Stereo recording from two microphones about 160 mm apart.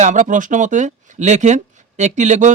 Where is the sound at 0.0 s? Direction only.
50° right (ahead or behind).